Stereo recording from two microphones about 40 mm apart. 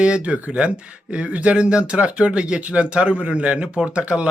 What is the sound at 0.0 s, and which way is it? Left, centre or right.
Speech, right.